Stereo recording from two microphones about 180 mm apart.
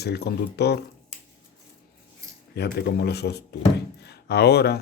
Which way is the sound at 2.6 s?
65° left (ahead or behind).